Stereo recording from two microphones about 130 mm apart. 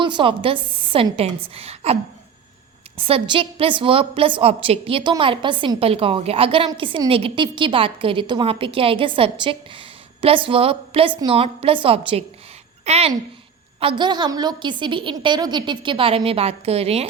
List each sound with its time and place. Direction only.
0.0 s a woman's voice: 40° right (ahead or behind)
3.0 s a woman's voice: 45° right (ahead or behind)
13.7 s a woman's voice: 40° right (ahead or behind)